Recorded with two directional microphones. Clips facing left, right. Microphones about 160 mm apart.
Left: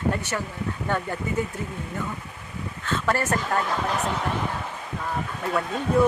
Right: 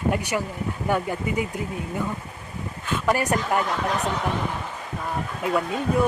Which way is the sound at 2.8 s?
15° right (ahead or behind).